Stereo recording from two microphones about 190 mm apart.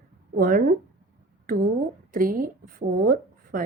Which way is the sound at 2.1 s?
45° right (ahead or behind).